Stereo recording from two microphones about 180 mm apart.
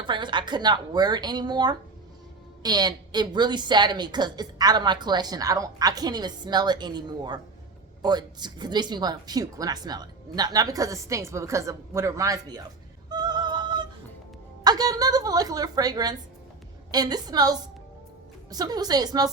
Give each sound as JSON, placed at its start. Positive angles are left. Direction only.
{"t": 0.0, "sound": "a woman's voice", "side_deg": -25}
{"t": 13.1, "sound": "music", "side_deg": -20}
{"t": 14.6, "sound": "a woman's voice", "side_deg": -20}